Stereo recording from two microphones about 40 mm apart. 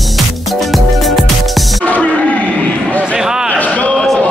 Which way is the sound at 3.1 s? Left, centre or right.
Centre.